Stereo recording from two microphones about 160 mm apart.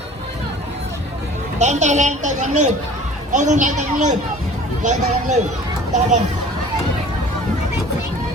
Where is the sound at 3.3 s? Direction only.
50° right (ahead or behind).